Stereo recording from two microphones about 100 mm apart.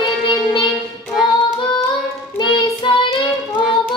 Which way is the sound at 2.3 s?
50° left (ahead or behind).